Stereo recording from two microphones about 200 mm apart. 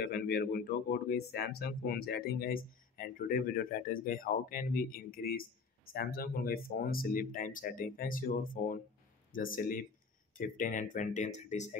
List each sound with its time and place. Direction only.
0.0 s speech: 50° left (ahead or behind)